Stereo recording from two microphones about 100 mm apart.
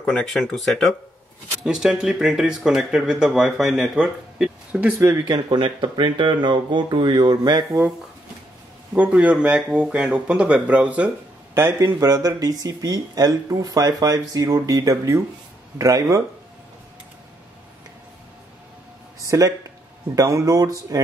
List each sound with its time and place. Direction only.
0.0 s speech: 5° left (ahead or behind)
1.6 s speech: 5° right (ahead or behind)
5.3 s speech: 55° right (ahead or behind)
8.9 s speech: 15° right (ahead or behind)
11.5 s speech: 25° right (ahead or behind)
19.2 s speech: 35° right (ahead or behind)